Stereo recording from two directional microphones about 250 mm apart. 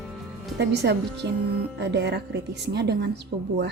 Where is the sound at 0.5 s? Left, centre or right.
Right.